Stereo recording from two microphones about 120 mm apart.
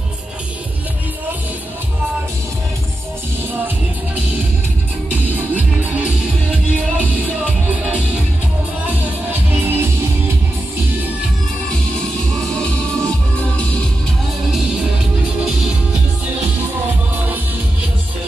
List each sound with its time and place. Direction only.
5.1 s music: 15° right (ahead or behind)
7.6 s music: 10° right (ahead or behind)
12.4 s music: 5° left (ahead or behind)
15.4 s music: 5° right (ahead or behind)